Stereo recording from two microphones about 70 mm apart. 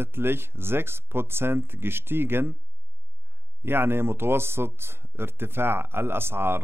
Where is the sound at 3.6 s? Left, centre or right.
Right.